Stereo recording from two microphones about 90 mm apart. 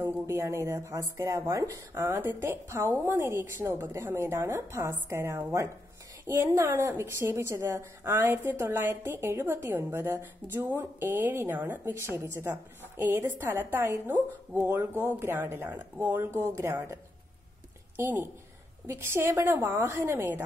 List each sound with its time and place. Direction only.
0.0 s a woman's voice: 30° right (ahead or behind)